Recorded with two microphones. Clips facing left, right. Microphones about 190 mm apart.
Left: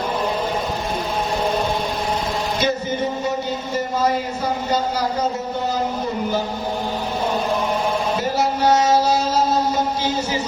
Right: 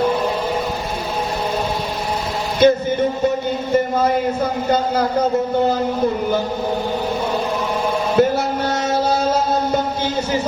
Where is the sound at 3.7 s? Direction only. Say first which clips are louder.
Right 4 dB; 55° right (ahead or behind).